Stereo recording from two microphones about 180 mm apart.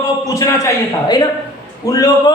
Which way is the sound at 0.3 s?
20° left (ahead or behind).